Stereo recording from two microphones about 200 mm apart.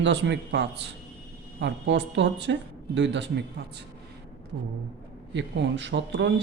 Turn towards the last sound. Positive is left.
turn(degrees=-65)  # may be behind; listen again after turning